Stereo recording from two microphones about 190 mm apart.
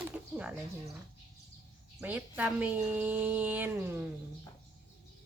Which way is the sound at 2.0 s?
10° right (ahead or behind).